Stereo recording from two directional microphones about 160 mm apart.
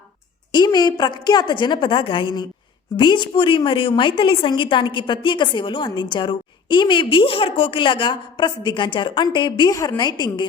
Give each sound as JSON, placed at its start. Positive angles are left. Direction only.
{"t": 0.5, "sound": "a woman's voice", "side_deg": 25}